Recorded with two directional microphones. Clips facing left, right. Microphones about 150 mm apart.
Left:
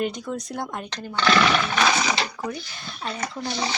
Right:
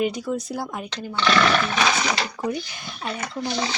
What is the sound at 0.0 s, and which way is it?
Speech, 5° right (ahead or behind).